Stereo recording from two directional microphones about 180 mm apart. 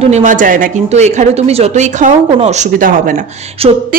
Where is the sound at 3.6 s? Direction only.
35° right (ahead or behind).